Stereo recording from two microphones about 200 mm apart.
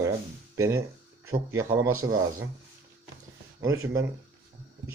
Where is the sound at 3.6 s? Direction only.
15° right (ahead or behind).